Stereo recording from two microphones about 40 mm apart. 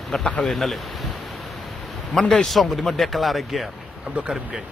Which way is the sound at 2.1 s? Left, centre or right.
Centre.